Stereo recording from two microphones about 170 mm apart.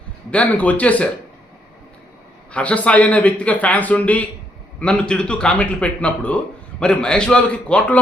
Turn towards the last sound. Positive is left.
turn(degrees=5)  # may be behind; listen again after turning